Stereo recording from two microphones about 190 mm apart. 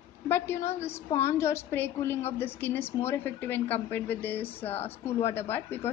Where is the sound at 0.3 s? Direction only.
15° left (ahead or behind).